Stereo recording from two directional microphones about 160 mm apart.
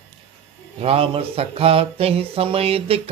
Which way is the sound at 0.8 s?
40° right (ahead or behind).